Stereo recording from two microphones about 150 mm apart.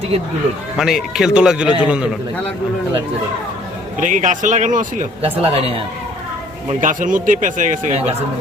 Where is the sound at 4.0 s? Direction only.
55° right (ahead or behind).